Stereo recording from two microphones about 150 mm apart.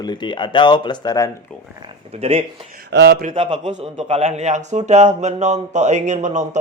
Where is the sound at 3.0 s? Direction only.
75° right (ahead or behind).